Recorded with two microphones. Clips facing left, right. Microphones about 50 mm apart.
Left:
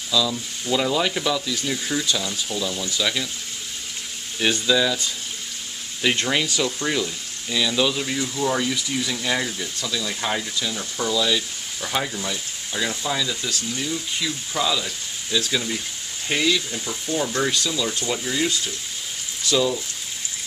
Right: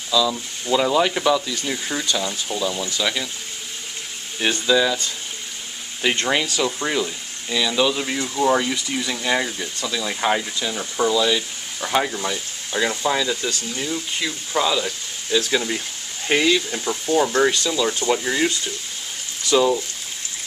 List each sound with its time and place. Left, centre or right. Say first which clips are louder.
0.3 s speech: right 3 dB; centre
4.4 s speech: right 2 dB; centre
6.0 s speech: right 1 dB; centre; by 18.5 s right
19.5 s speech: right 4 dB; right